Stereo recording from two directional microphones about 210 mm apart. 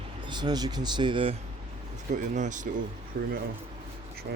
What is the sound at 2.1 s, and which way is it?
Speech, 35° right (ahead or behind).